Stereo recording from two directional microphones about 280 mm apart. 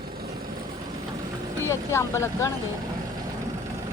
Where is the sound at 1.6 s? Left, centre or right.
Centre.